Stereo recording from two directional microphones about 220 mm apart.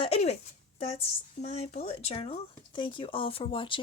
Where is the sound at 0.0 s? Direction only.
30° left (ahead or behind).